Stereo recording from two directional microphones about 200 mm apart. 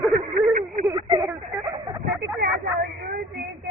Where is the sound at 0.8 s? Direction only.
20° right (ahead or behind).